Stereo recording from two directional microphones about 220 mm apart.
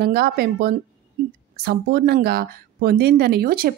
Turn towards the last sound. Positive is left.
turn(degrees=-40)  # may be behind; listen again after turning